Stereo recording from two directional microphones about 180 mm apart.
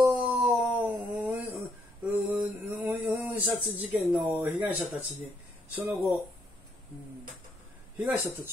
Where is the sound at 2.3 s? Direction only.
10° right (ahead or behind).